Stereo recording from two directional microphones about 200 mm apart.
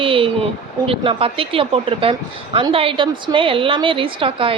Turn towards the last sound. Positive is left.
turn(degrees=-25)  # may be behind; listen again after turning